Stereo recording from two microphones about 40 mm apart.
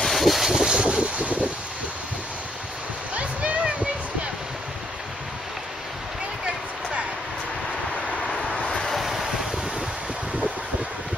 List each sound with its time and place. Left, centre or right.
0.0 s vehicle: centre
0.8 s wind noise: right
3.6 s a sound: right
8.3 s vehicle: centre
8.8 s vehicle: centre